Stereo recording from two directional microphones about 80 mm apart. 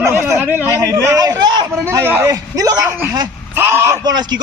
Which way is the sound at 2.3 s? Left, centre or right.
Right.